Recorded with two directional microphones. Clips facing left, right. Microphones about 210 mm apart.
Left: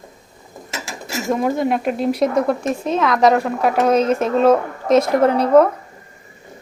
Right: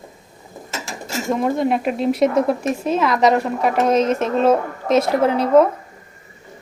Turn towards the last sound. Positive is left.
turn(degrees=0)  # may be behind; listen again after turning